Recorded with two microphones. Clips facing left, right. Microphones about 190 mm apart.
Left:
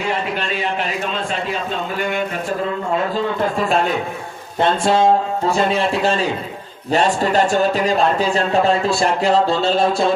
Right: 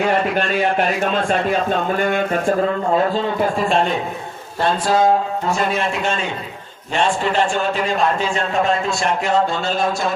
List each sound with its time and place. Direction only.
0.0 s speech: 55° right (ahead or behind)
4.6 s a man's voice: 25° left (ahead or behind)